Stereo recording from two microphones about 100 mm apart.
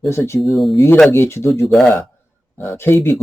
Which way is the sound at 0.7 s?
25° left (ahead or behind).